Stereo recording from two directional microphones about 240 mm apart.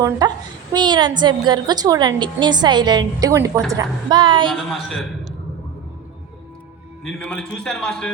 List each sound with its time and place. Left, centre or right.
0.2 s a woman's voice: centre
4.5 s a man's voice: centre
7.0 s a man's voice: centre